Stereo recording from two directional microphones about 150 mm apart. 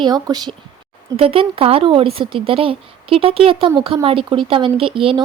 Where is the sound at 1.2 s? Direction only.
40° right (ahead or behind).